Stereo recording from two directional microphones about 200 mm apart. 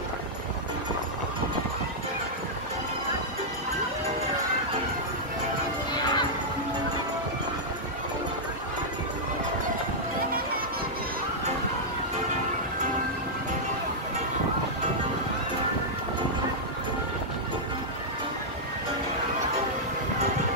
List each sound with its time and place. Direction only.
5.9 s music: 20° left (ahead or behind)